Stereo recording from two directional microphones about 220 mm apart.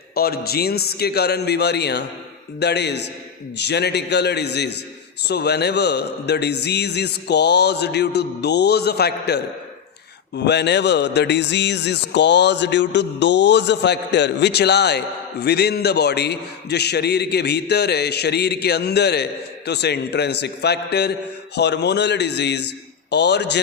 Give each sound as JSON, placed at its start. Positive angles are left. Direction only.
{"t": 0.1, "sound": "speech", "side_deg": 45}